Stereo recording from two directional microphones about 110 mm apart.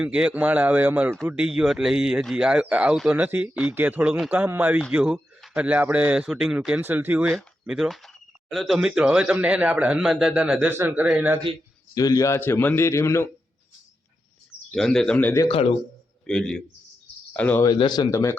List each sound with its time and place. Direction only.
0.0 s speech: 10° right (ahead or behind)
1.5 s speech: 5° right (ahead or behind)
7.6 s speech: 5° right (ahead or behind)
11.9 s a man's voice: 35° left (ahead or behind)
14.7 s speech: 5° left (ahead or behind)
15.4 s speech: 60° left (ahead or behind)
16.2 s a man's voice: 5° left (ahead or behind)
17.7 s speech: 45° left (ahead or behind)
18.1 s speech: 25° left (ahead or behind)